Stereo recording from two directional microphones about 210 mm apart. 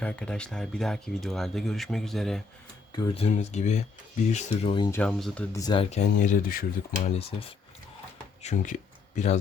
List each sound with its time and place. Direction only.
0.0 s speech: 5° left (ahead or behind)
2.9 s speech: 25° left (ahead or behind)
4.9 s speech: 5° left (ahead or behind)
5.6 s speech: 25° left (ahead or behind); by 7.1 s 40° left (ahead or behind)
7.2 s speech: 25° left (ahead or behind)